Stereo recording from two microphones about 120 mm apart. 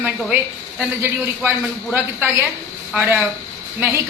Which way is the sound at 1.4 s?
15° right (ahead or behind).